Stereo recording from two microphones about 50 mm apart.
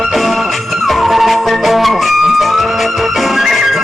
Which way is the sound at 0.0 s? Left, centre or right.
Centre.